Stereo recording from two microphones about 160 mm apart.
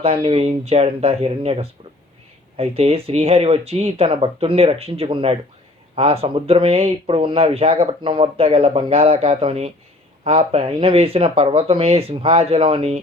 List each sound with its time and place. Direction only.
0.0 s speech: 35° right (ahead or behind)